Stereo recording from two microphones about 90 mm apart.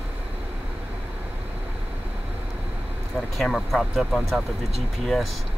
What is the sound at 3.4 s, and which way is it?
Speech, centre (ahead or behind).